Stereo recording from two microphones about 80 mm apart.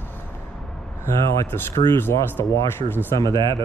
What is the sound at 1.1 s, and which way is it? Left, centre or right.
Speech, left.